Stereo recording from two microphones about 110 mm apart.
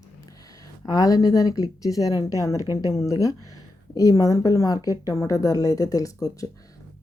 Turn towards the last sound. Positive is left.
turn(degrees=30)  # may be behind; listen again after turning